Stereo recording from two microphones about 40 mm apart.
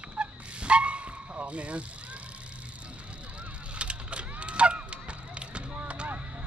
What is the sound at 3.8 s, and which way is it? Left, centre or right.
Honk, right.